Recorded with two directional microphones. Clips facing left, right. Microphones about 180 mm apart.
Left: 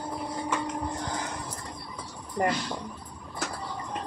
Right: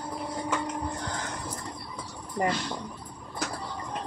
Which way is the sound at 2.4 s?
Centre (ahead or behind).